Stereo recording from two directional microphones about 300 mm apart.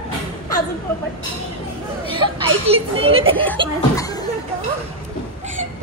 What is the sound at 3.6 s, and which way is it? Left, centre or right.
Speech, centre.